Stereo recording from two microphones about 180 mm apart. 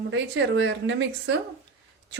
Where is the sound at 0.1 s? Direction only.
90° right.